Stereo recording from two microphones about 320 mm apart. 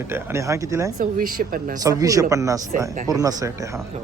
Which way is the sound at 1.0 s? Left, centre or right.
Right.